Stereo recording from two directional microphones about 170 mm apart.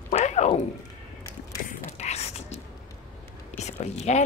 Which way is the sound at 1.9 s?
40° left (ahead or behind).